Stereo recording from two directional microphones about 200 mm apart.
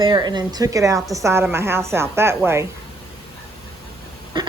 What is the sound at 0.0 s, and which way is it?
A woman's voice, 20° right (ahead or behind).